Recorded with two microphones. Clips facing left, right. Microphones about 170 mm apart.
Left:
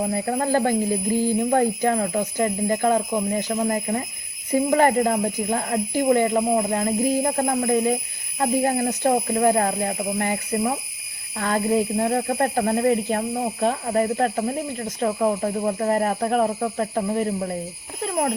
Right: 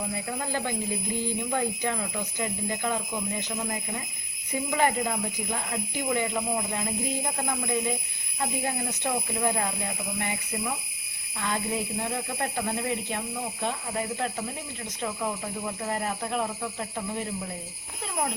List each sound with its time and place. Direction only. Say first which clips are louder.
0.1 s speech: left 10 dB; 50° left (ahead or behind)